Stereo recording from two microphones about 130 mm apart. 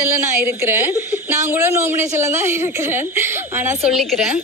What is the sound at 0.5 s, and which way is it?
A woman's voice, 15° right (ahead or behind).